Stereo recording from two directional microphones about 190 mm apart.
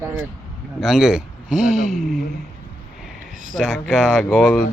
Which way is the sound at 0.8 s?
Centre (ahead or behind).